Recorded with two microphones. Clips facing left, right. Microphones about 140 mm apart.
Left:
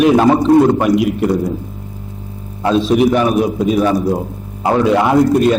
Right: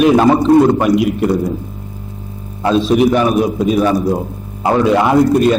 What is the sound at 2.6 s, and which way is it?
A man's voice, 15° right (ahead or behind).